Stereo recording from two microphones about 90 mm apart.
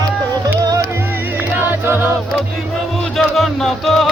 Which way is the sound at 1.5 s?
25° right (ahead or behind).